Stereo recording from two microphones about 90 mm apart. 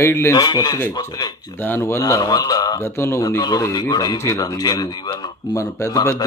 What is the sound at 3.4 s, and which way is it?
Speech, 45° left (ahead or behind).